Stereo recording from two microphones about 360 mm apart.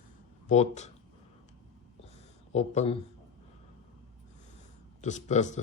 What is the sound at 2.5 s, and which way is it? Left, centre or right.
Speech, centre.